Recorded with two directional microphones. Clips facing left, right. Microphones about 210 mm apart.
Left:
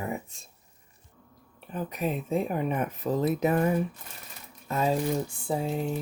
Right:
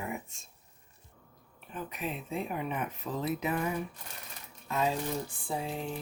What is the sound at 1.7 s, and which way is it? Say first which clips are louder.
Speech: left 7 dB; 40° left (ahead or behind).